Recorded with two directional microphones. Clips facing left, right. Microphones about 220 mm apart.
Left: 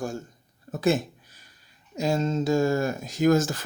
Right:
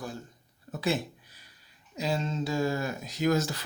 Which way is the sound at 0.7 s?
45° left (ahead or behind).